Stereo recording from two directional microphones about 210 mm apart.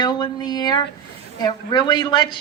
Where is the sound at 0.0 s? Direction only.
20° left (ahead or behind).